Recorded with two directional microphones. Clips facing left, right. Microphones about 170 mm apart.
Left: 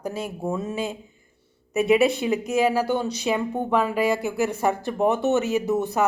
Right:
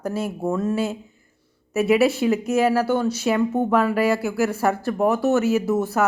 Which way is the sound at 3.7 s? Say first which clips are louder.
Even; 15° left (ahead or behind).